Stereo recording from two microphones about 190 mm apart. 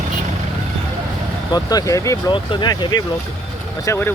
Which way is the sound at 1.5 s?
20° left (ahead or behind).